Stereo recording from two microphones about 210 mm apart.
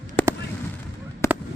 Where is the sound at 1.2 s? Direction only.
15° left (ahead or behind).